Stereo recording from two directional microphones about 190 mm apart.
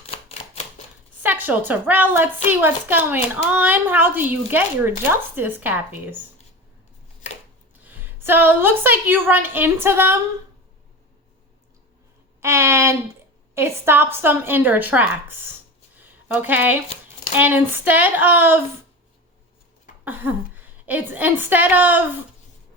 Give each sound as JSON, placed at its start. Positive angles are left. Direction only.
{"t": 0.1, "sound": "typewriter", "side_deg": 35}
{"t": 1.2, "sound": "speech", "side_deg": -10}
{"t": 7.9, "sound": "speech", "side_deg": -10}
{"t": 12.4, "sound": "speech", "side_deg": -15}
{"t": 16.0, "sound": "a sound", "side_deg": -10}
{"t": 17.3, "sound": "speech", "side_deg": -10}
{"t": 20.1, "sound": "speech", "side_deg": -10}